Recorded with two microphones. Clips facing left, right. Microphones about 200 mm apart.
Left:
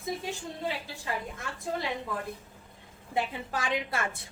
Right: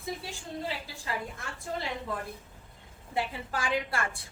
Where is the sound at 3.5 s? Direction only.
20° left (ahead or behind).